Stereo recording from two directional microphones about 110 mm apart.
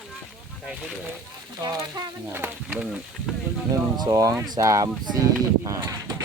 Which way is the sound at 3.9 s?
35° right (ahead or behind).